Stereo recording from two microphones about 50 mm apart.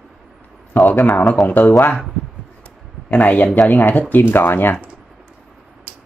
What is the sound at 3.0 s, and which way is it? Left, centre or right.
Speech, left.